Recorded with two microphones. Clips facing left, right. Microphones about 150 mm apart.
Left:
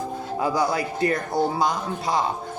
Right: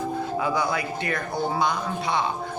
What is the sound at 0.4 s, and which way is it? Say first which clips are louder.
A man's voice: left 5 dB; 35° left (ahead or behind).